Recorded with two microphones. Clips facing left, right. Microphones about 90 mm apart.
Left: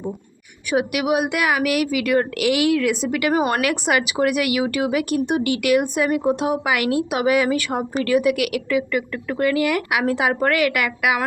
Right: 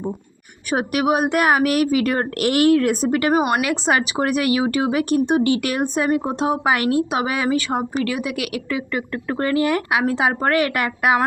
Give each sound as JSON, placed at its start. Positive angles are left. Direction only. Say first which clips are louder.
{"t": 0.7, "sound": "speech", "louder": "right 1 dB", "side_deg": -40}
{"t": 3.3, "sound": "speech", "louder": "right 1 dB", "side_deg": -20}